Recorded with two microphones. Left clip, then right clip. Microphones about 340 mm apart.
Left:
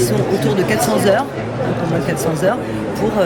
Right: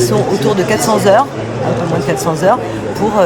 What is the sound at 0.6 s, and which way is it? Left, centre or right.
Speech, centre.